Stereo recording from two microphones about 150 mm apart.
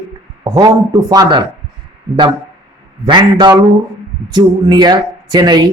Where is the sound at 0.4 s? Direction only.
25° right (ahead or behind).